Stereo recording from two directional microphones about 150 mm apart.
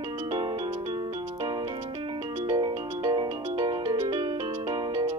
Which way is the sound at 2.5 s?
25° right (ahead or behind).